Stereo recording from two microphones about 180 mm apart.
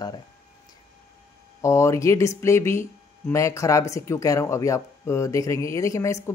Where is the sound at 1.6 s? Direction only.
15° left (ahead or behind).